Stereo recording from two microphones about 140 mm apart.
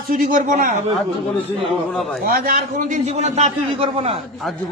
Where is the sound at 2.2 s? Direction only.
90° right; by 3.5 s 55° right (ahead or behind).